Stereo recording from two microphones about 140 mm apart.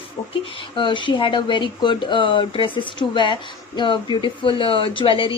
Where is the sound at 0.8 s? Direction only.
35° left (ahead or behind).